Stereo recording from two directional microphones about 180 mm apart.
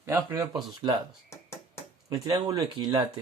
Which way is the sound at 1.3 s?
15° left (ahead or behind).